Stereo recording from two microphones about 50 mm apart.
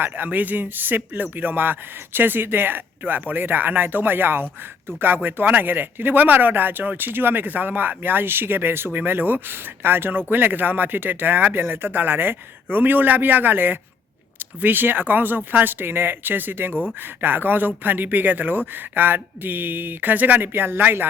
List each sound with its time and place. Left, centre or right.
0.0 s speech: right